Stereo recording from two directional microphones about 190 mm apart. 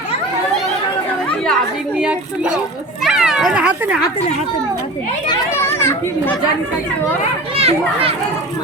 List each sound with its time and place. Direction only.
2.0 s speech: 5° right (ahead or behind)
3.0 s cat: 5° right (ahead or behind)
5.3 s a child's voice: 10° left (ahead or behind)
7.5 s a child's voice: 30° right (ahead or behind)